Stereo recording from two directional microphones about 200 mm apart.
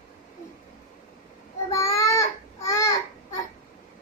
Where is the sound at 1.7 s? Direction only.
15° left (ahead or behind).